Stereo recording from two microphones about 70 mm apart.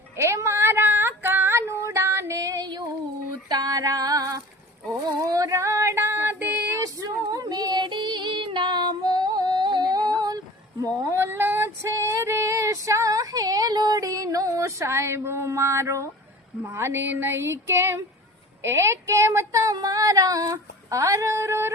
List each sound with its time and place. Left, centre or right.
0.2 s female singing: right
3.5 s female singing: right
5.0 s a sound: right
6.8 s female singing: right
10.2 s female singing: right
11.1 s female singing: right
16.6 s speech: right
19.7 s a sound: right